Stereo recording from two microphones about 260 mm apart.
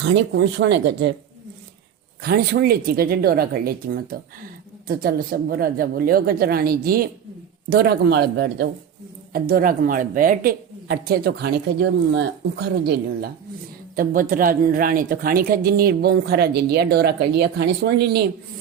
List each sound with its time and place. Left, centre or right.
0.0 s speech: right
2.2 s speech: right